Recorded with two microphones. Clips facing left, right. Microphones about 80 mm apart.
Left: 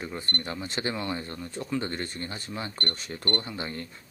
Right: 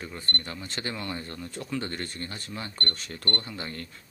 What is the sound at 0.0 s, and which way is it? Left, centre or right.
Speech, centre.